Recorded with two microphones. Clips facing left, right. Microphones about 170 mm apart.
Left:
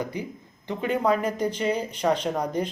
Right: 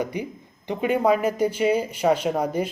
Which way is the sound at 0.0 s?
15° right (ahead or behind).